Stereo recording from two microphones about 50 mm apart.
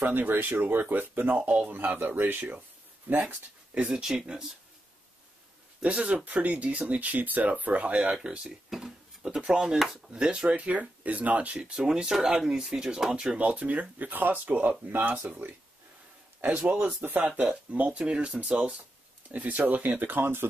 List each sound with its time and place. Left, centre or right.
0.0 s speech: right
1.3 s speech: right
1.7 s speech: right
3.1 s speech: right
3.8 s speech: centre
5.8 s speech: right
8.6 s a sound: centre
9.5 s speech: centre
10.1 s speech: centre
11.7 s speech: centre
13.4 s speech: right
16.7 s speech: right